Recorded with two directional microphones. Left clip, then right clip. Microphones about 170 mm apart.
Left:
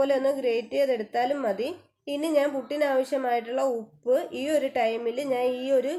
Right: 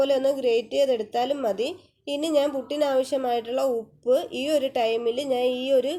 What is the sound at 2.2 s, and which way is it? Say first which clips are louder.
A woman's voice: right 1 dB; 35° right (ahead or behind).